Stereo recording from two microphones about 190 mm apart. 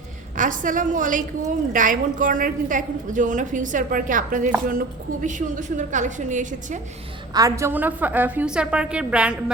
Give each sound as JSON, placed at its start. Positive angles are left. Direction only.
{"t": 0.3, "sound": "a woman's voice", "side_deg": -45}
{"t": 7.3, "sound": "a woman's voice", "side_deg": -15}